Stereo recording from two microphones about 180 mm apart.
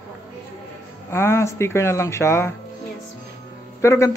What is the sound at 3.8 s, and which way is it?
Speech, 15° left (ahead or behind).